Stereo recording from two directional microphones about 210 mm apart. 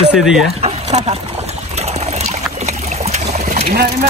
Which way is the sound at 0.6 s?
30° right (ahead or behind).